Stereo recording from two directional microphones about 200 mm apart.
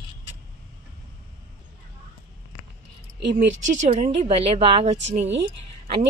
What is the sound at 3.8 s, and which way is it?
Speech, 35° right (ahead or behind).